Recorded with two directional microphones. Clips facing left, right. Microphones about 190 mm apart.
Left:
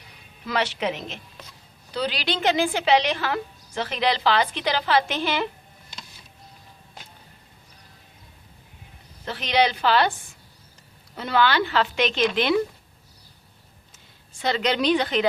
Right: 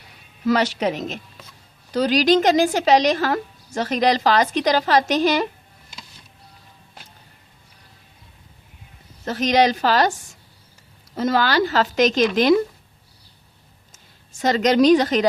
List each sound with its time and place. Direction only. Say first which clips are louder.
0.4 s a woman's voice: right 6 dB; 40° right (ahead or behind)
9.2 s a woman's voice: right 5 dB; 45° right (ahead or behind)
13.9 s a woman's voice: right 1 dB; 45° right (ahead or behind)